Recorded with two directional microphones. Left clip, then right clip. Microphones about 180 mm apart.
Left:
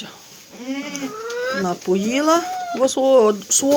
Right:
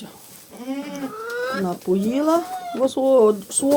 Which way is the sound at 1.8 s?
Centre (ahead or behind).